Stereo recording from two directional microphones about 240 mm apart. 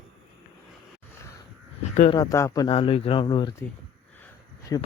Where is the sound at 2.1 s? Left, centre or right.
Centre.